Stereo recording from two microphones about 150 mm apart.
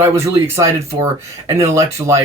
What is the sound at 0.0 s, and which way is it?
A man's voice, 20° right (ahead or behind).